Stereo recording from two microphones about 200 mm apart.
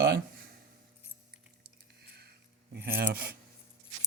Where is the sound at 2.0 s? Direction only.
55° right (ahead or behind).